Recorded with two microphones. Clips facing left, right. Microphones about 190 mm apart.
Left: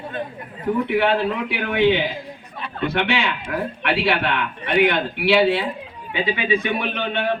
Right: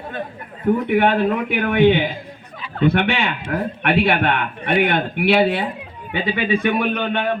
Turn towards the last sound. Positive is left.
turn(degrees=-50)  # may be behind; listen again after turning